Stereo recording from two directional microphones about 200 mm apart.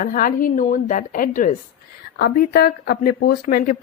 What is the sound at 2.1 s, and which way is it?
Speech, 50° left (ahead or behind).